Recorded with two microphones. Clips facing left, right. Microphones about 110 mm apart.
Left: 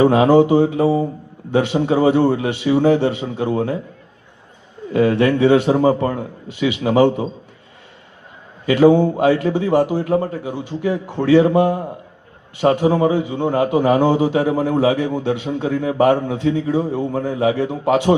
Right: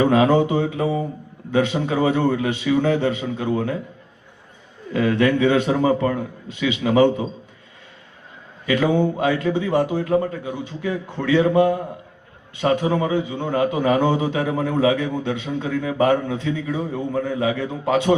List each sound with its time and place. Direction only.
0.0 s a man's voice: 30° left (ahead or behind)
4.9 s a man's voice: 30° left (ahead or behind)
8.6 s a man's voice: 30° left (ahead or behind)